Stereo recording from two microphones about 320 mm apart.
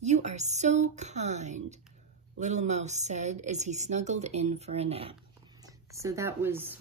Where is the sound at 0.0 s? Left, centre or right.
Right.